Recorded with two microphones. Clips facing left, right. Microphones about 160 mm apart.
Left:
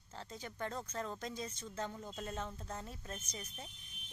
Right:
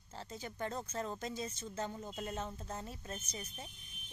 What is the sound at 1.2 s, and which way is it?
Speech, 5° right (ahead or behind).